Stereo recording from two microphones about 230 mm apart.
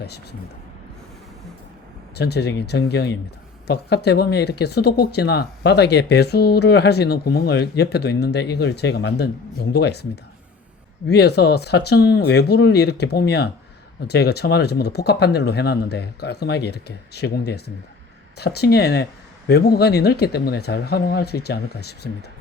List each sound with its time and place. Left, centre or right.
0.0 s speech: left
2.1 s speech: left
11.1 s speech: left